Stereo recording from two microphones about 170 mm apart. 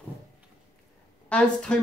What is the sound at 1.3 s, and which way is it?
Speech, 5° left (ahead or behind).